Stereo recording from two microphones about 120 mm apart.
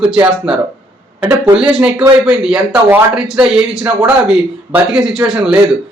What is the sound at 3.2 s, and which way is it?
A man's voice, 5° right (ahead or behind).